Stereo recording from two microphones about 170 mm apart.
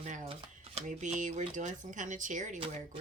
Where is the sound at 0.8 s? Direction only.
45° right (ahead or behind).